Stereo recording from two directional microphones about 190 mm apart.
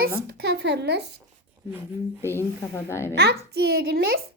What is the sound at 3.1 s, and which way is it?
A child's voice, 60° right (ahead or behind).